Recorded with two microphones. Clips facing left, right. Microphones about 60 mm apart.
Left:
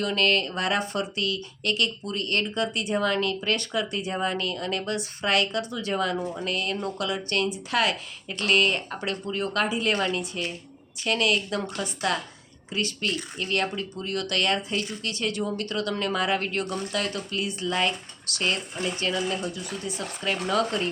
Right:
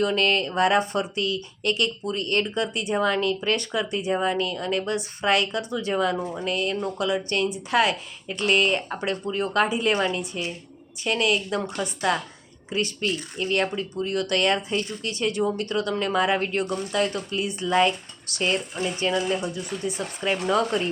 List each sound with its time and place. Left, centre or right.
0.0 s speech: centre